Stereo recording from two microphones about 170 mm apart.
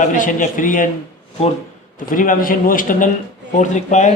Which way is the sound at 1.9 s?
50° left (ahead or behind).